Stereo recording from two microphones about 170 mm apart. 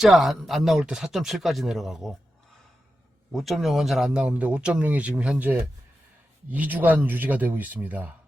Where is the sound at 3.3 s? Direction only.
Centre (ahead or behind).